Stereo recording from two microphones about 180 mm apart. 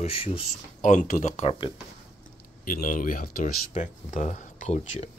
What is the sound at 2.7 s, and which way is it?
Speech, 50° left (ahead or behind).